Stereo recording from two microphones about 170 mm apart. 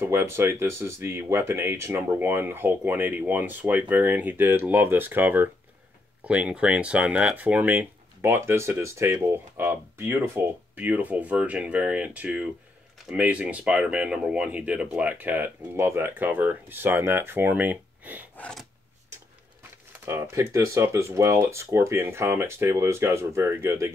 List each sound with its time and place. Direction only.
0.0 s speech: 15° right (ahead or behind)
18.3 s a sound: 10° left (ahead or behind)
20.1 s speech: 15° right (ahead or behind)